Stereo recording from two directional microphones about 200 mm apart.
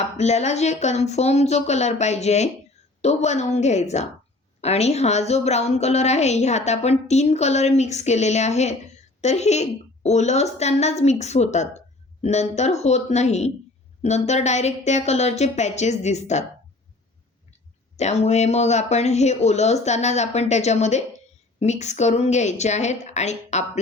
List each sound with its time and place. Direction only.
0.2 s a woman's voice: 35° left (ahead or behind)
17.9 s a woman's voice: 35° left (ahead or behind)